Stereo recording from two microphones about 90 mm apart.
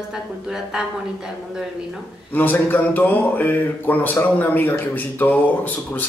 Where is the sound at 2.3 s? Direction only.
20° left (ahead or behind).